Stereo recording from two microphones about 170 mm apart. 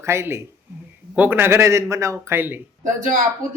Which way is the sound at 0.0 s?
15° right (ahead or behind).